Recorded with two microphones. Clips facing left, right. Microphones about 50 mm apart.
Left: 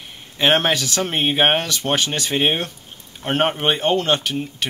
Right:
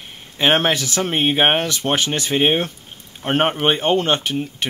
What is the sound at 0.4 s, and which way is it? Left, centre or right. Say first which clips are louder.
Speech: even; centre.